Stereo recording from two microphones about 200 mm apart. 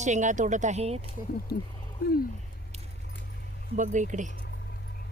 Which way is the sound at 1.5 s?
50° left (ahead or behind).